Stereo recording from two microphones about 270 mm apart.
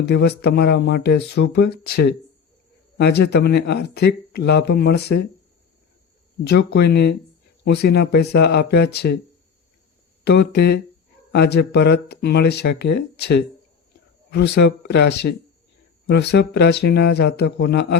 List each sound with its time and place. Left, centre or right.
0.0 s speech: left
6.4 s speech: left
10.2 s speech: left